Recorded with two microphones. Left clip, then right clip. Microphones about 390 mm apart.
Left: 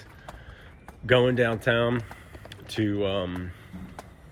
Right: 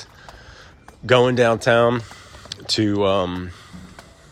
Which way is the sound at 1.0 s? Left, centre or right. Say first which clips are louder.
Right 6 dB; centre.